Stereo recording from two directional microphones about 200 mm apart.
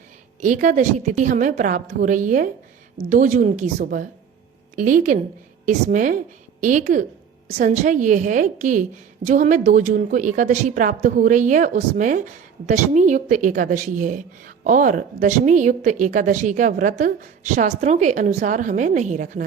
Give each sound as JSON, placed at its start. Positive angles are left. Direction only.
{"t": 0.4, "sound": "a woman's voice", "side_deg": -40}